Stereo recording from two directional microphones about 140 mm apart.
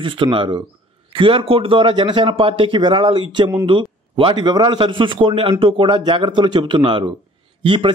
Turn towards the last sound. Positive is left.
turn(degrees=-35)  # may be behind; listen again after turning